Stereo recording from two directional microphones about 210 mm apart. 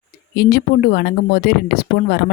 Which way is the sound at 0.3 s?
45° left (ahead or behind).